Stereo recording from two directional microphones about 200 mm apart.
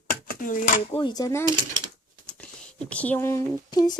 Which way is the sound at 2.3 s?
5° left (ahead or behind).